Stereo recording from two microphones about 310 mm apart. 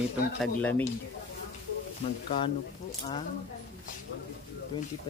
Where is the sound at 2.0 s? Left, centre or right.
Centre.